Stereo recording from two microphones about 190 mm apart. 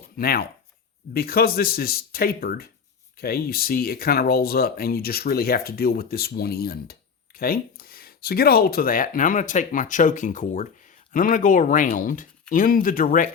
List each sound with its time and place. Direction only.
0.2 s speech: 50° left (ahead or behind)